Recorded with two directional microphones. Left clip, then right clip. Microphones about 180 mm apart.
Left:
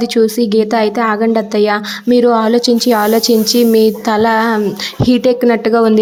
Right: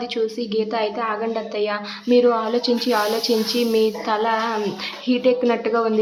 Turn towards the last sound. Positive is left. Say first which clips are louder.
# left 9 dB
turn(degrees=40)  # may be behind; listen again after turning